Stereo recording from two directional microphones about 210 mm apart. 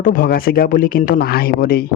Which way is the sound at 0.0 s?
40° left (ahead or behind).